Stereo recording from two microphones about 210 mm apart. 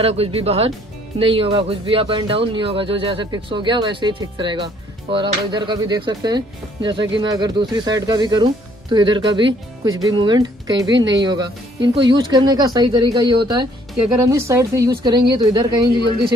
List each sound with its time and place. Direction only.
0.0 s speech: 30° right (ahead or behind)